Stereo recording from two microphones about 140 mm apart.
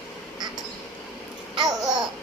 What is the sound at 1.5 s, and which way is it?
Babbling, 25° right (ahead or behind).